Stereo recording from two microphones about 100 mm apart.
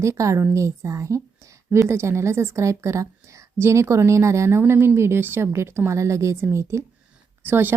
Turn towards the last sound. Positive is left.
turn(degrees=-20)  # may be behind; listen again after turning